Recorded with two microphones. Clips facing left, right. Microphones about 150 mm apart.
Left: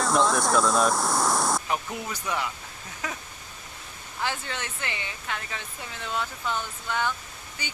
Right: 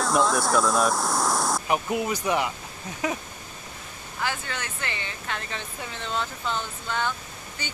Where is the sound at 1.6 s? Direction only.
15° right (ahead or behind).